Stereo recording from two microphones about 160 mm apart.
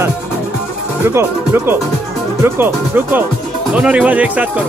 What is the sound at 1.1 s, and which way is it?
Speech, 15° right (ahead or behind).